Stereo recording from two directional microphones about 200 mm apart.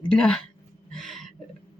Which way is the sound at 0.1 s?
5° left (ahead or behind).